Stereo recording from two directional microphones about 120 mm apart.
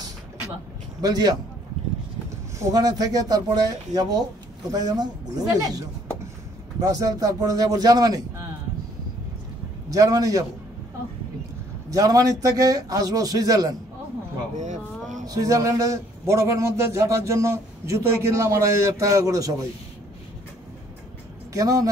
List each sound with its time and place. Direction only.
1.0 s a man's voice: 35° right (ahead or behind)
2.6 s a man's voice: 30° right (ahead or behind)
9.8 s a man's voice: 30° right (ahead or behind)
11.9 s a man's voice: 30° right (ahead or behind)
14.6 s a sound: 85° right
15.2 s a man's voice: 30° right (ahead or behind)
21.5 s a man's voice: 30° right (ahead or behind)